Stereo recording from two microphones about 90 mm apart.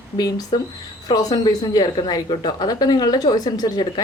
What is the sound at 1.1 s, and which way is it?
A woman's voice, 50° left (ahead or behind).